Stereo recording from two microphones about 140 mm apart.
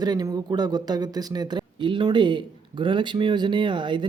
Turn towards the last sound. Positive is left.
turn(degrees=-35)  # may be behind; listen again after turning